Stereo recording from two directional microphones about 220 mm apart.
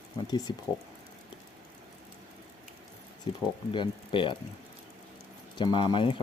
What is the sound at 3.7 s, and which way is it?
Speech, 20° left (ahead or behind).